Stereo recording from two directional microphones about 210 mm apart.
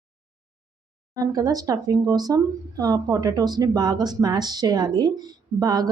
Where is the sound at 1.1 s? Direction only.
15° right (ahead or behind).